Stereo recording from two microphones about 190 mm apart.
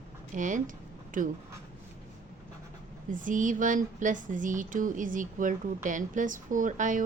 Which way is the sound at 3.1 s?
45° right (ahead or behind).